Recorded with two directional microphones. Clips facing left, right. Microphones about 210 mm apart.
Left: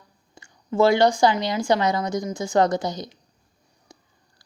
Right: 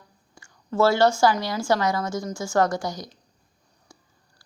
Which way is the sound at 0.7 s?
15° left (ahead or behind).